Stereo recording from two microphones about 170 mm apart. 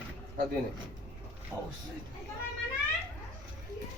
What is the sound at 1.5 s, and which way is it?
Speech, 15° right (ahead or behind).